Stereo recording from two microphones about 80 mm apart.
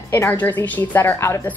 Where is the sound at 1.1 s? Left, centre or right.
Left.